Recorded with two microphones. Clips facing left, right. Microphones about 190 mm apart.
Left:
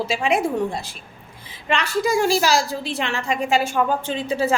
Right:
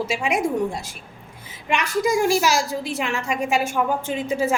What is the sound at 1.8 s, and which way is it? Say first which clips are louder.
Speech: right 1 dB; 30° left (ahead or behind).